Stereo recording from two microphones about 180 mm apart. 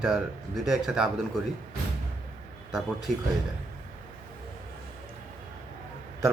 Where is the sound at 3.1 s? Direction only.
45° right (ahead or behind).